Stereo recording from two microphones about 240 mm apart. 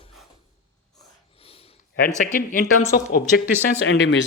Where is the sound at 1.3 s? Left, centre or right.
Left.